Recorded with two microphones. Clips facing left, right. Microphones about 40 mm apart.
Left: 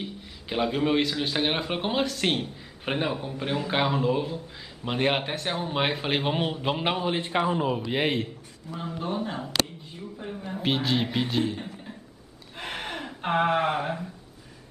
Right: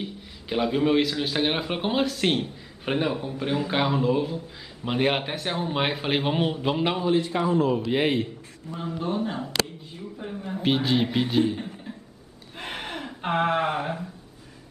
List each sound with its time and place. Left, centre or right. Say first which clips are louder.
0.0 s speech: right 1 dB; centre
6.8 s a man's voice: right 4 dB; centre
7.2 s a man's voice: right 3 dB; left
7.6 s speech: right 3 dB; centre
10.1 s a sound: right 2 dB; centre
10.5 s speech: right 3 dB; centre
12.5 s gasp: even; centre